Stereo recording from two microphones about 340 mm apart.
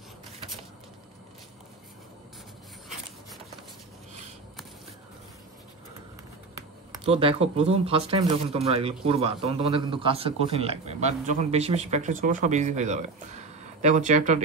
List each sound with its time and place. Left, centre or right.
7.1 s a man's voice: centre